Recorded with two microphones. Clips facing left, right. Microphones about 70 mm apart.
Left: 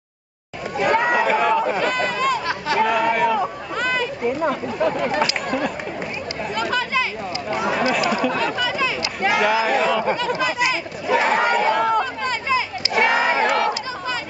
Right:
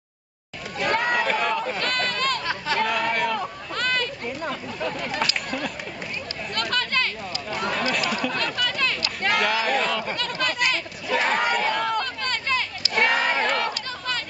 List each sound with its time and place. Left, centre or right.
0.7 s chatter: centre
4.5 s speech: left
6.5 s chatter: centre
7.5 s speech: centre
10.1 s chatter: centre